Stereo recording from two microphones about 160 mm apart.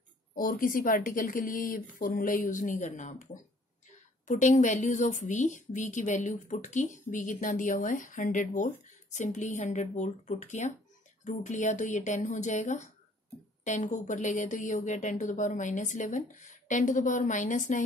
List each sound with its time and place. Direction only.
0.3 s speech: 60° left (ahead or behind)
4.3 s a woman's voice: 50° left (ahead or behind)